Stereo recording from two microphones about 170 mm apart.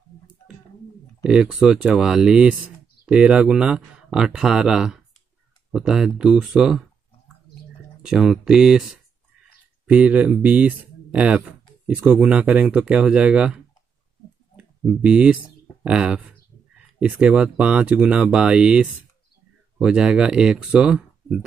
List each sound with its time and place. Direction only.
1.2 s speech: 5° right (ahead or behind)
8.0 s speech: 5° right (ahead or behind)
14.6 s speech: 5° right (ahead or behind)